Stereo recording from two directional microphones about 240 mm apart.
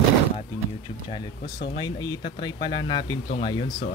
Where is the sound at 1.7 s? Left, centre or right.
Centre.